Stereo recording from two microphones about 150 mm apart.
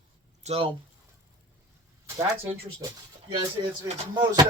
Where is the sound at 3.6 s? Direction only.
30° right (ahead or behind).